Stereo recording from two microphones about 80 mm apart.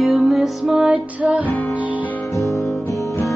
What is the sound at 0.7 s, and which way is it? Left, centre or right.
Music, centre.